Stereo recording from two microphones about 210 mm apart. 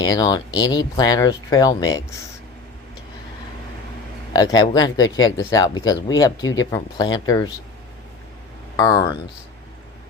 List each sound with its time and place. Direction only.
0.0 s speech: 20° left (ahead or behind)
4.4 s speech: 20° left (ahead or behind)
8.7 s speech: 20° left (ahead or behind)